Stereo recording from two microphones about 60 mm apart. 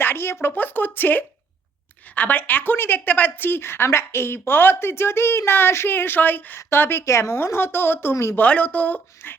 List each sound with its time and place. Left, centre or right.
0.0 s a sound: left
0.4 s a woman's voice: left
7.0 s a woman's voice: left
8.1 s speech: left
8.4 s speech: left